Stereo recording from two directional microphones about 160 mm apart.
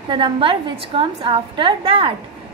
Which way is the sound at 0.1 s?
30° right (ahead or behind).